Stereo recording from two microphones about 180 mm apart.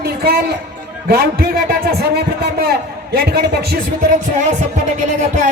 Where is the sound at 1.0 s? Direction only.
60° right (ahead or behind).